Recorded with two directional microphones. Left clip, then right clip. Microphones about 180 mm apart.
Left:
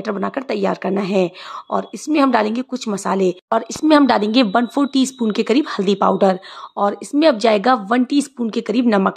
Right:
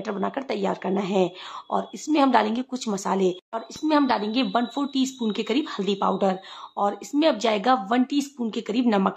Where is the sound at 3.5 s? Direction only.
40° left (ahead or behind).